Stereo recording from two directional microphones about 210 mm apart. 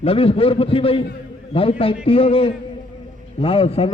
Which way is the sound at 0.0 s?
25° left (ahead or behind).